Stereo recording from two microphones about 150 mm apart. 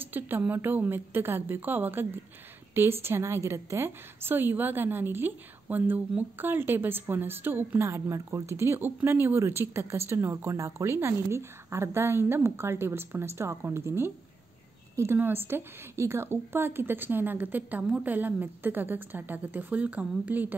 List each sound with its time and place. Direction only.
0.0 s a woman's voice: 15° right (ahead or behind)